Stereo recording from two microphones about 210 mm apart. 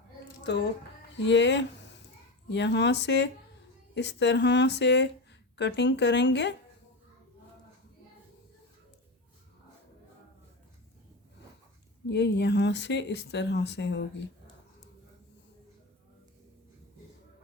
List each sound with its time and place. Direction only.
0.4 s speech: 55° left (ahead or behind)
1.1 s a sound: 55° left (ahead or behind)
2.5 s speech: 55° left (ahead or behind)
12.0 s speech: 55° left (ahead or behind)